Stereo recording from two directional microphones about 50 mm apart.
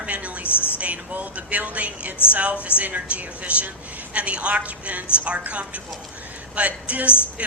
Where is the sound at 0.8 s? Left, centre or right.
Right.